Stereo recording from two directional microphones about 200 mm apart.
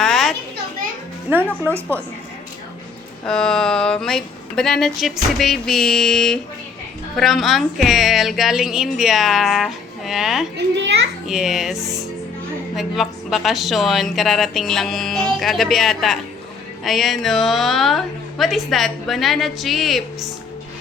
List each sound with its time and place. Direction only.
0.0 s children playing: centre (ahead or behind)
1.6 s a woman's voice: 10° right (ahead or behind)
3.2 s a woman's voice: 5° left (ahead or behind)
10.8 s a child's voice: 60° right (ahead or behind)
11.3 s a woman's voice: centre (ahead or behind)